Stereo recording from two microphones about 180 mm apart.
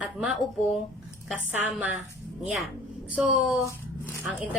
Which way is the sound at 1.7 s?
10° right (ahead or behind).